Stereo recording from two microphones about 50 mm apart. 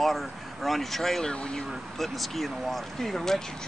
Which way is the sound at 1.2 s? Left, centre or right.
Centre.